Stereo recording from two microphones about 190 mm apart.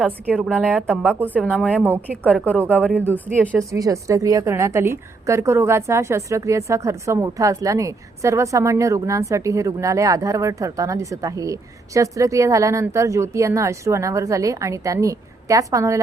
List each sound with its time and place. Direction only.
0.3 s a woman's voice: centre (ahead or behind)
1.2 s speech: 10° right (ahead or behind)
1.5 s a woman's voice: 5° left (ahead or behind)
2.0 s speech: 10° right (ahead or behind)